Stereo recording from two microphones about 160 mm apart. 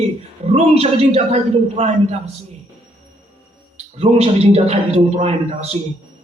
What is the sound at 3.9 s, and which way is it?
A man's voice, 40° right (ahead or behind).